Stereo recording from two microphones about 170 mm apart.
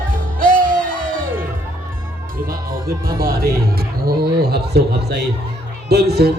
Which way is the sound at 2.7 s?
60° right (ahead or behind).